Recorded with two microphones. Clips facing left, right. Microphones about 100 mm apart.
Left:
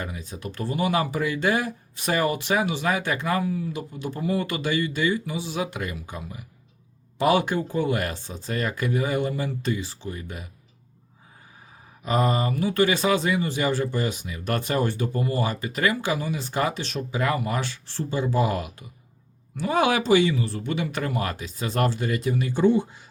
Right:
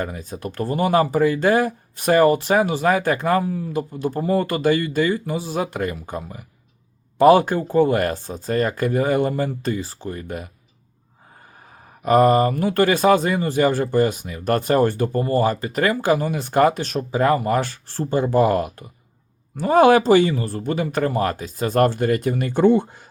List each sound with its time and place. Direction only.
0.0 s speech: 45° right (ahead or behind)
12.0 s speech: 50° right (ahead or behind)